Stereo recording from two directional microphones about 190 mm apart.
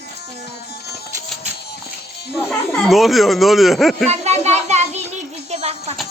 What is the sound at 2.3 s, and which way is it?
Speech, centre (ahead or behind).